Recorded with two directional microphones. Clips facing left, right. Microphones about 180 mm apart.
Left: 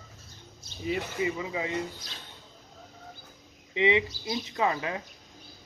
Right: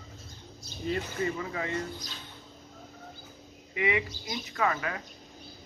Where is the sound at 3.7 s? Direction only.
25° left (ahead or behind).